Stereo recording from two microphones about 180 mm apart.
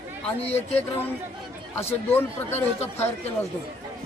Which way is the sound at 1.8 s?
10° left (ahead or behind).